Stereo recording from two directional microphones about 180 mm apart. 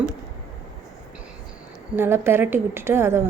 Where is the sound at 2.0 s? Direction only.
15° right (ahead or behind).